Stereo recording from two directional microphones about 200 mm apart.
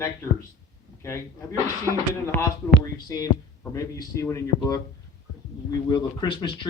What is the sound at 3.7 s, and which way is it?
Speech, 15° left (ahead or behind).